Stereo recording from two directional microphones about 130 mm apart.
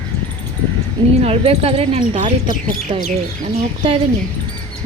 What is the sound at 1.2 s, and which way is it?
Speech, 50° right (ahead or behind).